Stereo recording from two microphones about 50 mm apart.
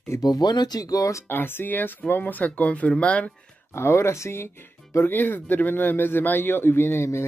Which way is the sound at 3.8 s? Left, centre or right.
Left.